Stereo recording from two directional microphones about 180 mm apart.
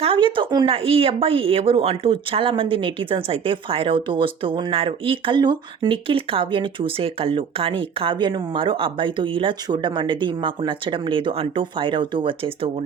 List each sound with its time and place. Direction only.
0.0 s speech: 30° right (ahead or behind)